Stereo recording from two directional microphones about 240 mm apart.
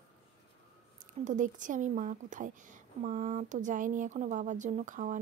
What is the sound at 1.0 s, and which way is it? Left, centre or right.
Speech, right.